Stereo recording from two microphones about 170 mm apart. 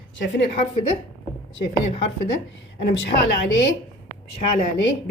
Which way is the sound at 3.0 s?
75° left (ahead or behind).